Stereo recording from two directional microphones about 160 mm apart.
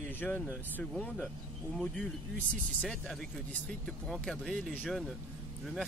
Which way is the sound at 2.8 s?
5° left (ahead or behind).